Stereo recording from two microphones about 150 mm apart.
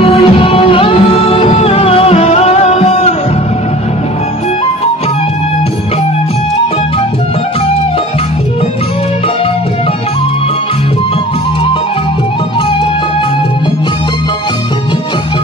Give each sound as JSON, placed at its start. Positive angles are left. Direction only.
{"t": 0.0, "sound": "music", "side_deg": 35}